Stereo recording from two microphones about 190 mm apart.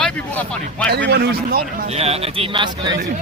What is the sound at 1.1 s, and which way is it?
Speech, 60° right (ahead or behind).